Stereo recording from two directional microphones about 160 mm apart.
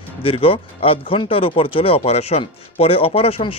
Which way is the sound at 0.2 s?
35° left (ahead or behind).